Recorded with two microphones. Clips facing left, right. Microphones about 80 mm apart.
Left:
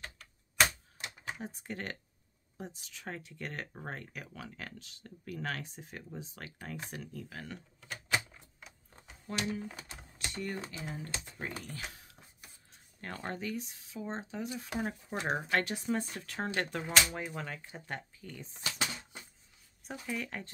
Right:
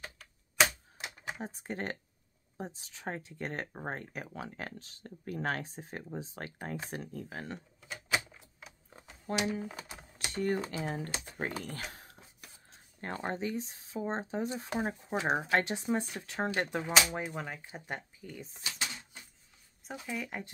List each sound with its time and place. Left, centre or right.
0.0 s typewriter: centre
1.4 s speech: right
7.8 s typewriter: centre
10.3 s speech: right
13.0 s speech: right
14.8 s speech: right
18.3 s speech: centre
19.9 s speech: centre